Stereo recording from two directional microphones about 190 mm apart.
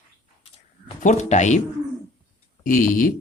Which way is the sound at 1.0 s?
40° left (ahead or behind).